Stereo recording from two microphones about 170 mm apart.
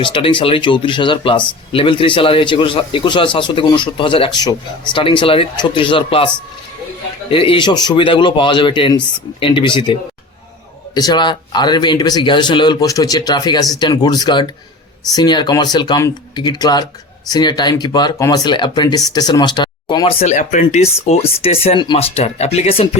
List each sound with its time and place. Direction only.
0.0 s speech: 30° left (ahead or behind)
10.9 s speech: 25° left (ahead or behind)